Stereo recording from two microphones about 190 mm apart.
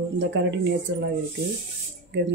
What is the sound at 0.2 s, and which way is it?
Speech, 70° right (ahead or behind).